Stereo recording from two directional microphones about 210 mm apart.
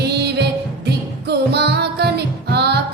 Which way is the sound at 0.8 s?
50° right (ahead or behind).